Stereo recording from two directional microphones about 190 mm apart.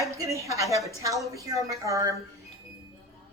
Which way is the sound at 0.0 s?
15° right (ahead or behind).